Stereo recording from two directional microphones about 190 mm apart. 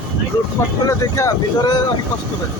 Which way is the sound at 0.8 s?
20° left (ahead or behind).